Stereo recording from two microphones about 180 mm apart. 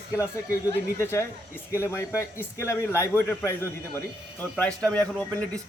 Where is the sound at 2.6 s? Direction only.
15° left (ahead or behind).